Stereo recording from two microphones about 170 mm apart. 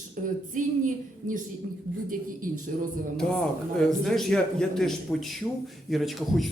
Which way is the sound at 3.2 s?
5° left (ahead or behind).